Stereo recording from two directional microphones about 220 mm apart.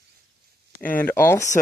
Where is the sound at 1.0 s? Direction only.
10° left (ahead or behind).